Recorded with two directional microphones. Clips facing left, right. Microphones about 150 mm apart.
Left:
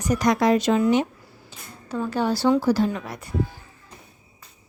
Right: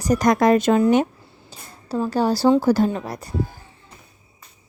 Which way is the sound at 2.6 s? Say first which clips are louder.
Right 3 dB; 45° right (ahead or behind).